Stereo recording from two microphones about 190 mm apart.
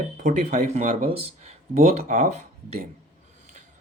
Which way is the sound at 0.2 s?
40° right (ahead or behind).